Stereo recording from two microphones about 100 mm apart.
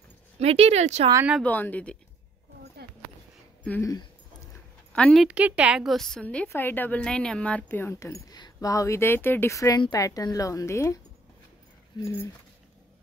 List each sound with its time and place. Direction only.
0.4 s speech: 90° right
1.4 s a woman's voice: 15° left (ahead or behind)
4.9 s speech: 10° left (ahead or behind)
5.2 s a woman's voice: 10° right (ahead or behind)
5.9 s a woman's voice: 5° left (ahead or behind)
7.6 s speech: 25° left (ahead or behind)
12.0 s speech: 25° left (ahead or behind)